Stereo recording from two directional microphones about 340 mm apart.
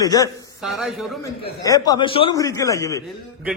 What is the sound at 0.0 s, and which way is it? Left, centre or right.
Speech, centre.